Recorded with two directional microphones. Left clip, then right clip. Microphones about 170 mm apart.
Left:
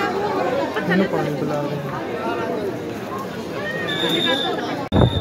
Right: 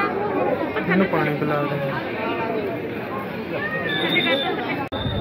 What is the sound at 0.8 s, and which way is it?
Speech, 5° left (ahead or behind).